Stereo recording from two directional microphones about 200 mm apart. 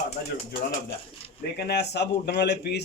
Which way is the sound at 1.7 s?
55° left (ahead or behind).